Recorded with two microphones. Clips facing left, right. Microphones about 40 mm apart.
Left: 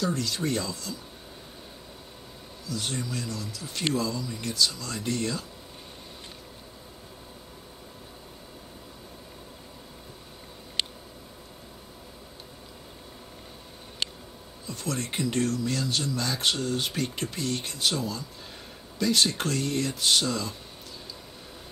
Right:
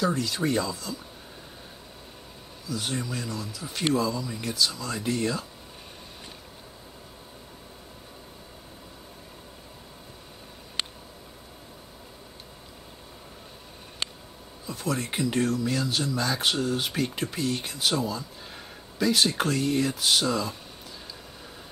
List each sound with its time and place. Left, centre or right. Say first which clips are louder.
0.0 s speech: right 2 dB; centre
2.6 s speech: right 1 dB; centre
14.7 s speech: right 3 dB; centre